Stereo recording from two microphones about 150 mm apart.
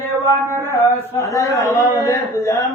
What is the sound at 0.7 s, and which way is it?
A man's voice, 20° left (ahead or behind).